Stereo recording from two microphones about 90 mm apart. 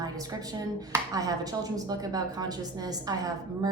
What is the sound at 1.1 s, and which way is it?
A woman's voice, 45° right (ahead or behind).